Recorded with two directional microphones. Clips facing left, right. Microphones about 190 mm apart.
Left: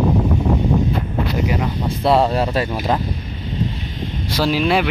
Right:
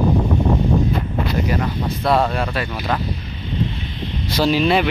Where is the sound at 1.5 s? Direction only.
10° left (ahead or behind).